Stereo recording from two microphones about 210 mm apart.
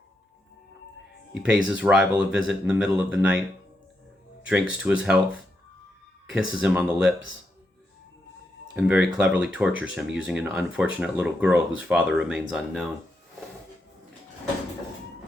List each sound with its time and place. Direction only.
1.3 s speech: 5° right (ahead or behind)
4.4 s speech: 5° right (ahead or behind)
8.7 s speech: 5° right (ahead or behind)